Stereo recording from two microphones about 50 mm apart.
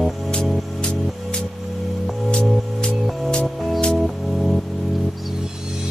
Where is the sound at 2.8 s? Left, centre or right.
Centre.